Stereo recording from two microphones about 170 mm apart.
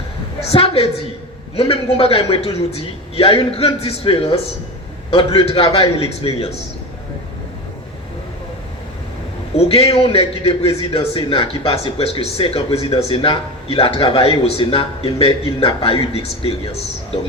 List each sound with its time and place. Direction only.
0.5 s a man's voice: 35° left (ahead or behind)
9.6 s a man's voice: 35° left (ahead or behind)